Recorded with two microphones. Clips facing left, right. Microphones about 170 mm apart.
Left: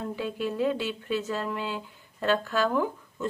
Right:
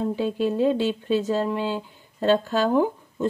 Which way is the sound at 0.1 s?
30° right (ahead or behind).